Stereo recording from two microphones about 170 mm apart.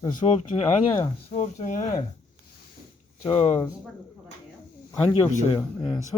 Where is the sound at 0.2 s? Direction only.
30° left (ahead or behind).